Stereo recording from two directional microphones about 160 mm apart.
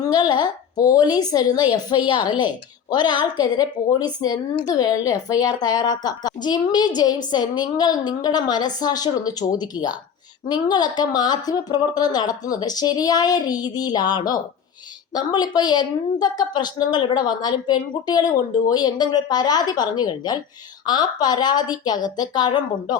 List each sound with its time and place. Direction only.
0.0 s a woman's voice: 25° left (ahead or behind)